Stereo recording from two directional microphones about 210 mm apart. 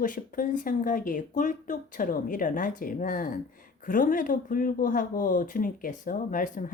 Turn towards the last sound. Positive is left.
turn(degrees=35)  # may be behind; listen again after turning